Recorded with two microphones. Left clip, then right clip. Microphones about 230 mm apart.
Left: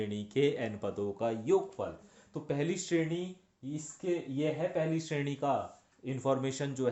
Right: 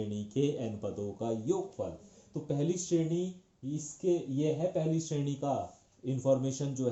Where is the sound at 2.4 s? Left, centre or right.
Left.